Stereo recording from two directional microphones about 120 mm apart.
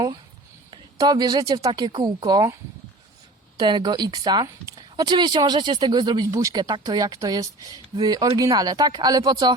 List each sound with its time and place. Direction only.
0.7 s speech: 35° right (ahead or behind)
3.6 s speech: 40° right (ahead or behind)